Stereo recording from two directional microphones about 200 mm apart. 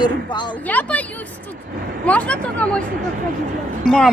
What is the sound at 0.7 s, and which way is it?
Speech, 5° left (ahead or behind).